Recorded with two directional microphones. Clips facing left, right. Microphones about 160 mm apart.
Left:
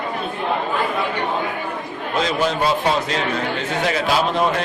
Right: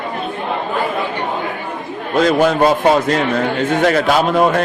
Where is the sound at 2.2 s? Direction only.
50° right (ahead or behind).